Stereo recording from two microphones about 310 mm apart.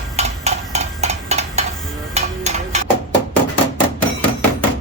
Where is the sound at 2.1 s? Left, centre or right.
Right.